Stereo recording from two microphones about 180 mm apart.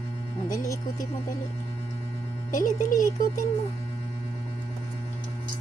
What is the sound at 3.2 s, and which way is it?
Speech, 50° left (ahead or behind).